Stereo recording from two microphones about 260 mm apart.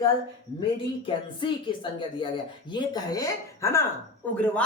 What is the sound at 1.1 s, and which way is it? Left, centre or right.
A woman's voice, centre.